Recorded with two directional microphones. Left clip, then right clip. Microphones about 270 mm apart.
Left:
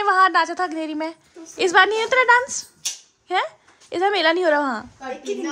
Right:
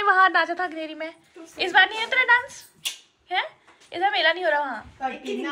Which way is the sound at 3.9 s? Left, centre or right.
Left.